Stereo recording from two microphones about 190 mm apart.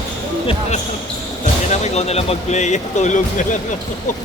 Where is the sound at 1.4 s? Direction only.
35° left (ahead or behind).